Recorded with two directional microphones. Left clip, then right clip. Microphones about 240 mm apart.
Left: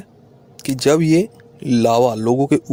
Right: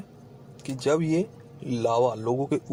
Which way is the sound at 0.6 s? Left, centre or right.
Left.